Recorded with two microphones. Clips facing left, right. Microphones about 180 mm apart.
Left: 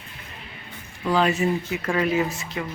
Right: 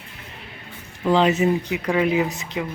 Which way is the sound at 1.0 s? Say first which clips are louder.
Right 4 dB; 20° right (ahead or behind).